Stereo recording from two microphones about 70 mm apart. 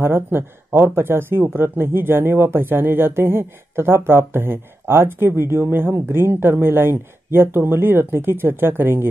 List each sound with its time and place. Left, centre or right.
0.0 s speech: right